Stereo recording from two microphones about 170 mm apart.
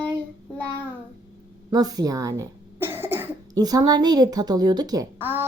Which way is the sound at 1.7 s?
20° right (ahead or behind).